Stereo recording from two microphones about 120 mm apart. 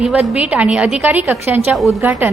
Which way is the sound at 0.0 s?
10° right (ahead or behind).